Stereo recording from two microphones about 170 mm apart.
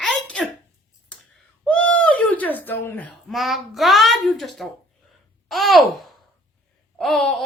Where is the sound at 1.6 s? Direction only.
5° left (ahead or behind).